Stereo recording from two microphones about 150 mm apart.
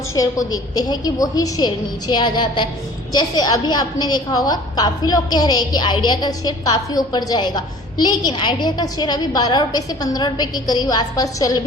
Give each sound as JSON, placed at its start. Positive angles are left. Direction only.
{"t": 0.2, "sound": "a woman's voice", "side_deg": 25}